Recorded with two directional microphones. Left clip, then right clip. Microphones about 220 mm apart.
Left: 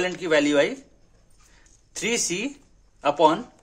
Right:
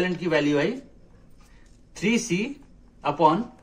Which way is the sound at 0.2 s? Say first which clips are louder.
Left 5 dB; 55° left (ahead or behind).